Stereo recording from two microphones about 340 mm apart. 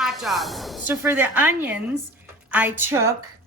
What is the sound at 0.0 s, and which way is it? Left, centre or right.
A woman's voice, centre.